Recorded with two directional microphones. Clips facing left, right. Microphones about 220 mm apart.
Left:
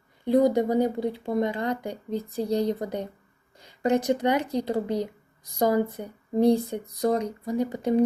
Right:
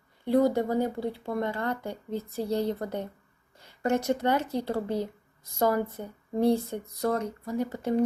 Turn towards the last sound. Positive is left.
turn(degrees=15)  # may be behind; listen again after turning